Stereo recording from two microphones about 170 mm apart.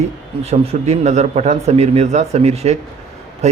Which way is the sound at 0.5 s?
40° right (ahead or behind).